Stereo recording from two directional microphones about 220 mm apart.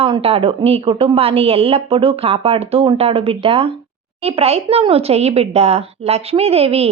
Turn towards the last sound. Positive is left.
turn(degrees=-25)  # may be behind; listen again after turning